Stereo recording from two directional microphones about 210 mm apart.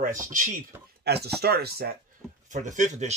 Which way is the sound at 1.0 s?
50° right (ahead or behind).